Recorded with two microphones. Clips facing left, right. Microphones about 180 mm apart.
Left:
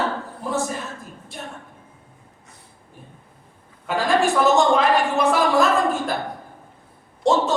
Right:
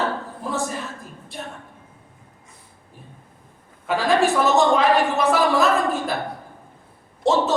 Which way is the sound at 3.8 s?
Centre (ahead or behind).